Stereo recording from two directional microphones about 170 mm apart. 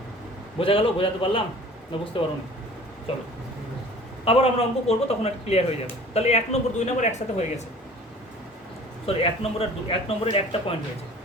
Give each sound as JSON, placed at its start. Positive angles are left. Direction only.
{"t": 0.6, "sound": "speech", "side_deg": 30}
{"t": 4.3, "sound": "speech", "side_deg": 35}
{"t": 9.0, "sound": "speech", "side_deg": 35}